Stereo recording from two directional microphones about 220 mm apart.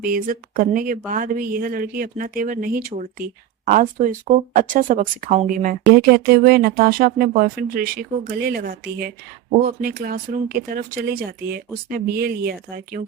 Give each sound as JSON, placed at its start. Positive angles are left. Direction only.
{"t": 0.0, "sound": "speech", "side_deg": -40}
{"t": 6.0, "sound": "speech", "side_deg": -45}